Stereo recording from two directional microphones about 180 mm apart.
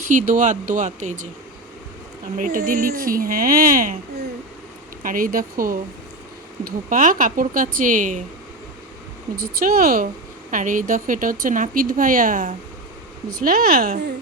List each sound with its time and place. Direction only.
0.0 s speech: 45° right (ahead or behind)
2.4 s speech: 50° right (ahead or behind)
5.0 s speech: 50° right (ahead or behind)
9.3 s speech: 55° right (ahead or behind)